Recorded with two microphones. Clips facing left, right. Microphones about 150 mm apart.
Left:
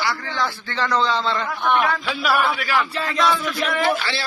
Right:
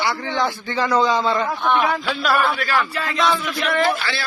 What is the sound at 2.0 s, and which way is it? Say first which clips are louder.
Speech: right 1 dB; centre (ahead or behind).